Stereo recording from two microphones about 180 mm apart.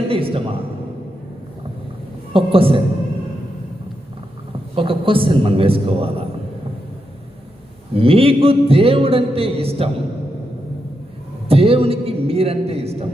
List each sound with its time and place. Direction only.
0.1 s a sound: 30° right (ahead or behind)
2.3 s a man's voice: 30° right (ahead or behind)
4.7 s a man's voice: 30° right (ahead or behind)
7.9 s a man's voice: 30° right (ahead or behind)
11.4 s a man's voice: 30° right (ahead or behind)